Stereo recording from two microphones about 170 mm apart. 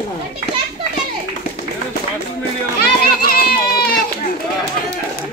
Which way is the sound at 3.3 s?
65° left (ahead or behind).